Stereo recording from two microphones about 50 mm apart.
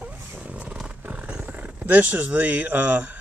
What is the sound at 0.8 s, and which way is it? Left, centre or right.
Roaring cats, right.